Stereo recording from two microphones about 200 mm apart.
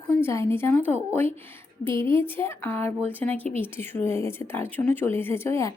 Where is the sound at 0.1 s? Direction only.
15° left (ahead or behind).